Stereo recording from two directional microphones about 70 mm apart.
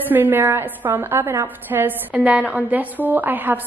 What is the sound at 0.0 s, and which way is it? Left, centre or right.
A woman's voice, right.